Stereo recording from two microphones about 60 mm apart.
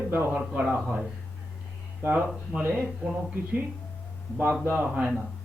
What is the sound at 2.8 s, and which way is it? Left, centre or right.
Speech, right.